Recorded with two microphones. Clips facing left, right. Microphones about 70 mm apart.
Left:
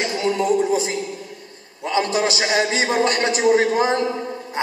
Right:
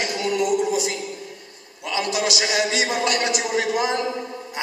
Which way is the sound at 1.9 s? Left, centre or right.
Left.